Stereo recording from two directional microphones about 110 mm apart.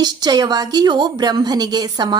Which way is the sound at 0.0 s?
40° right (ahead or behind).